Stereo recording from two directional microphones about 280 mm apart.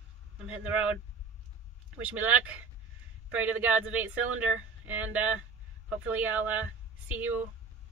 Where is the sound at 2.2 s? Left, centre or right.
Centre.